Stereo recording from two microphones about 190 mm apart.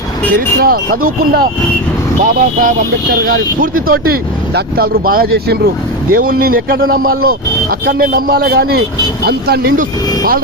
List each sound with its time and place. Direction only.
0.3 s a man's voice: 50° right (ahead or behind)